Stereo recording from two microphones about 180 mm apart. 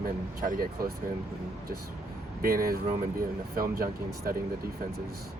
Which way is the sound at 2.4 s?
55° right (ahead or behind).